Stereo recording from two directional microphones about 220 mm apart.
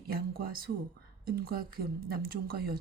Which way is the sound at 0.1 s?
45° right (ahead or behind).